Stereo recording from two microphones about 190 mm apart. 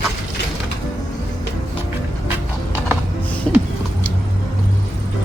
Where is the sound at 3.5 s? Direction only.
5° left (ahead or behind).